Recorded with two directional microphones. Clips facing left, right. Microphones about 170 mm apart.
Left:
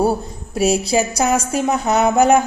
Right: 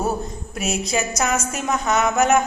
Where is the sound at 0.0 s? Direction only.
30° left (ahead or behind).